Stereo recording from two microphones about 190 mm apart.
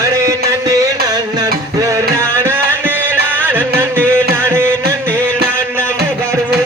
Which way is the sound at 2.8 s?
10° right (ahead or behind).